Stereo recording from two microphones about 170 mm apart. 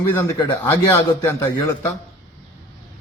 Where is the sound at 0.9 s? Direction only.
15° left (ahead or behind).